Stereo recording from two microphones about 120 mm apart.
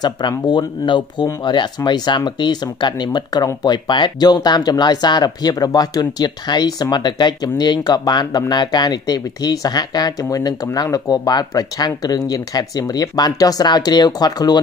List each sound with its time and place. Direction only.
0.0 s speech: 35° left (ahead or behind)